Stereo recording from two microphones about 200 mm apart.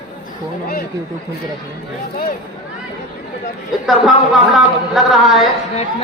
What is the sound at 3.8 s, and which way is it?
Speech, centre (ahead or behind).